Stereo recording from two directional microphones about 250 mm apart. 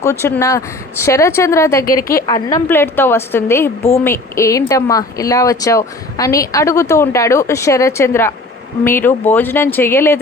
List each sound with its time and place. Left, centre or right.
0.0 s a woman's voice: centre
1.8 s a woman's voice: left
2.1 s a woman's voice: centre